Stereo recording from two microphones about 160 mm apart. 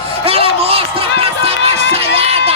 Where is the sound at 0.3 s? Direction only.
40° right (ahead or behind).